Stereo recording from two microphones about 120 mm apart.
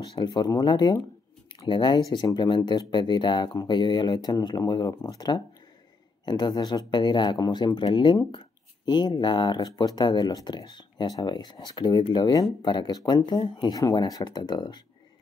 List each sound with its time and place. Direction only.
0.2 s speech: 35° left (ahead or behind)